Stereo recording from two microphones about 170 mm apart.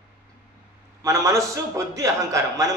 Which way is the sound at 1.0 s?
20° right (ahead or behind).